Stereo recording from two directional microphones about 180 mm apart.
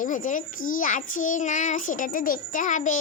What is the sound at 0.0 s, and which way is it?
A child's voice, 45° left (ahead or behind).